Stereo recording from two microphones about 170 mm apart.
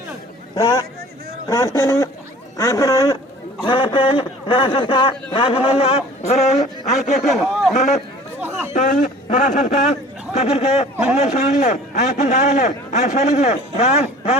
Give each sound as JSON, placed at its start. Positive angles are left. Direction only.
{"t": 0.5, "sound": "a sound", "side_deg": 20}
{"t": 1.5, "sound": "speech", "side_deg": 15}
{"t": 7.3, "sound": "a man's voice", "side_deg": 0}
{"t": 7.8, "sound": "a man's voice", "side_deg": 45}
{"t": 8.4, "sound": "chatter", "side_deg": -10}
{"t": 8.7, "sound": "a man's voice", "side_deg": 45}
{"t": 10.9, "sound": "a man's voice", "side_deg": -10}
{"t": 11.2, "sound": "a man's voice", "side_deg": 40}